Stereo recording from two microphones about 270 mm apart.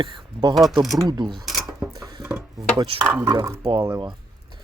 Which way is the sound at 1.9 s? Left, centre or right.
Centre.